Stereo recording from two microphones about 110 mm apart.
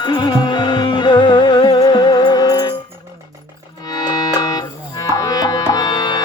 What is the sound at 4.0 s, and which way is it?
Music, 35° left (ahead or behind).